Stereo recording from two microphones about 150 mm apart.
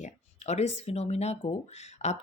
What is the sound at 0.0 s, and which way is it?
Speech, 50° left (ahead or behind).